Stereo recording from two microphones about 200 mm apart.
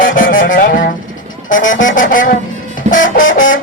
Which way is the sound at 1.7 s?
40° left (ahead or behind).